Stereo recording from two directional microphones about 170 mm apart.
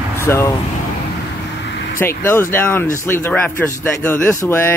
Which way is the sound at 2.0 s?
15° left (ahead or behind).